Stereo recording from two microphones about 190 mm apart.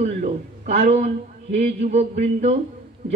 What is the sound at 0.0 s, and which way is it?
A man's voice, 40° right (ahead or behind).